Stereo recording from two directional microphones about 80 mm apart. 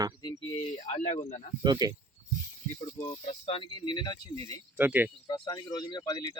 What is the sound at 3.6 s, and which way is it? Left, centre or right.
Speech, left.